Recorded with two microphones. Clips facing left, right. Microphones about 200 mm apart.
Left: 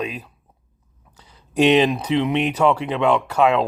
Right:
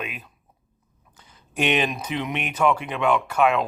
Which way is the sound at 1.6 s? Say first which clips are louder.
Left 8 dB; 30° left (ahead or behind).